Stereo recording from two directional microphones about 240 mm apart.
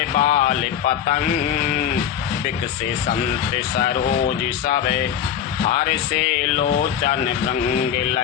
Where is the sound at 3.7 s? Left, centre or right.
Left.